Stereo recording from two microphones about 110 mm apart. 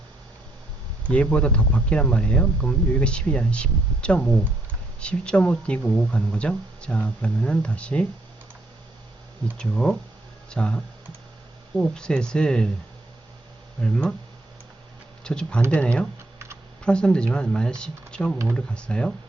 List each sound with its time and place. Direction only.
1.1 s speech: 10° left (ahead or behind)
9.6 s speech: 5° left (ahead or behind)
11.8 s speech: 5° left (ahead or behind)
13.8 s speech: 10° left (ahead or behind)
15.2 s speech: 5° left (ahead or behind)